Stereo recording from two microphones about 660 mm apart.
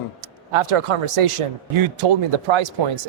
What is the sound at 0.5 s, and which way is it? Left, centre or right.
Speech, right.